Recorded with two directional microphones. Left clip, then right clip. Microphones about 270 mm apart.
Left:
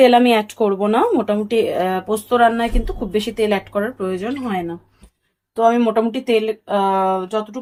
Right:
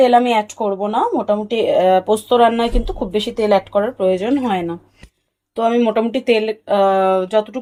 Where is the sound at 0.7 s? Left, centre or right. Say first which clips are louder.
Even; left.